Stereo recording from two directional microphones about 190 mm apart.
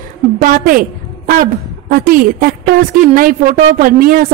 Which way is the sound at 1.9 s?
45° right (ahead or behind).